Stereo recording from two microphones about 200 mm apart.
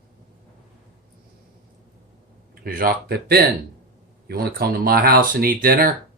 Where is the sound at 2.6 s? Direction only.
45° right (ahead or behind).